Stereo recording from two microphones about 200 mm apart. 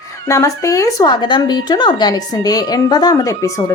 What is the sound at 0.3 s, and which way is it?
Speech, 15° left (ahead or behind).